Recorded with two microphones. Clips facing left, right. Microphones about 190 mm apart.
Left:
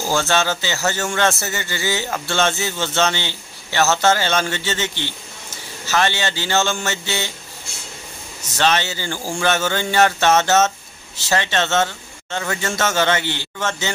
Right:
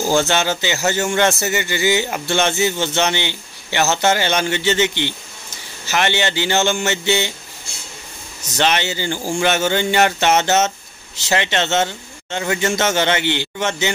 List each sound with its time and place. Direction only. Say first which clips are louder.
0.1 s a man's voice: right 1 dB; 20° right (ahead or behind)
8.5 s a man's voice: right 1 dB; 20° right (ahead or behind)